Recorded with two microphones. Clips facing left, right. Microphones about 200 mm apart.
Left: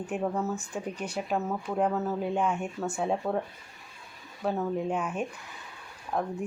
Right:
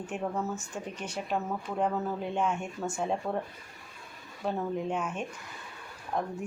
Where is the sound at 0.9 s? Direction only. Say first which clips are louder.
Left 3 dB; 35° left (ahead or behind).